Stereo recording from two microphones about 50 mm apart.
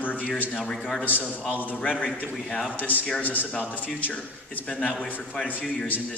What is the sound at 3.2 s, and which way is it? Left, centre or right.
A man's voice, left.